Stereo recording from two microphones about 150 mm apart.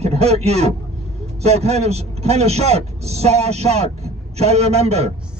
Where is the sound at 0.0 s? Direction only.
45° right (ahead or behind).